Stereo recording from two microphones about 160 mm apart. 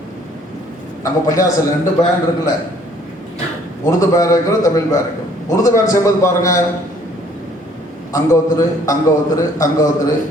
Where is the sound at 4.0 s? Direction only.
20° left (ahead or behind).